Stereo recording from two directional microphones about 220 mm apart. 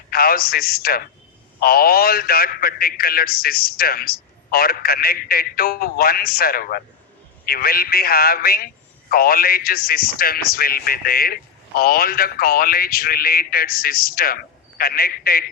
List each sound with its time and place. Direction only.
0.1 s a man's voice: 45° left (ahead or behind)